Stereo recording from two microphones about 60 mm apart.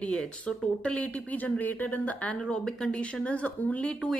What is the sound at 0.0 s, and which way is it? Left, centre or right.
Speech, centre.